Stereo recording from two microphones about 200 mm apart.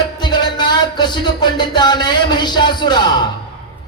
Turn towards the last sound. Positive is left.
turn(degrees=20)  # may be behind; listen again after turning